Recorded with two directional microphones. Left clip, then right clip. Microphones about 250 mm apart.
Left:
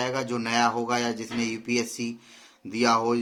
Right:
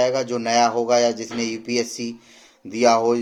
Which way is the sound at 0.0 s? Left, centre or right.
Centre.